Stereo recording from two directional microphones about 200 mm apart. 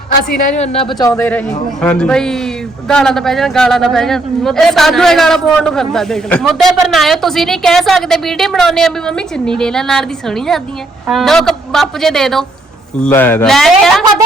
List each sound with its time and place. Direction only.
0.3 s a woman's voice: 35° left (ahead or behind); by 13.9 s centre (ahead or behind)